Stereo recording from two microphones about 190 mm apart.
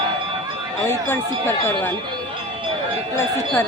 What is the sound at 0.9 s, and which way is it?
Speech, 10° left (ahead or behind).